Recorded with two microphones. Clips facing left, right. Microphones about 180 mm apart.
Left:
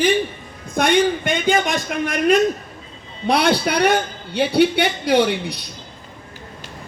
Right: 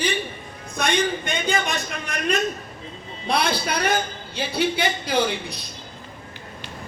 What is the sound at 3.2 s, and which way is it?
A man's voice, 70° left (ahead or behind).